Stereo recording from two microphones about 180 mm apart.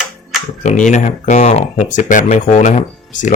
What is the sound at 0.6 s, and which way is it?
Speech, 40° left (ahead or behind).